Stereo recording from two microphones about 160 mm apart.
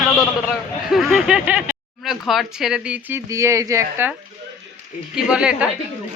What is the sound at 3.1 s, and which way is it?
Speech, 20° right (ahead or behind).